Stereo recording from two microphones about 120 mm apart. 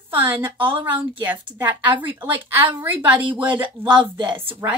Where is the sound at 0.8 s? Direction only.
15° right (ahead or behind).